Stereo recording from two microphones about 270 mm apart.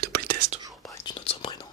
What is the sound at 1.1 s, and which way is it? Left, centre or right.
Whispering, centre.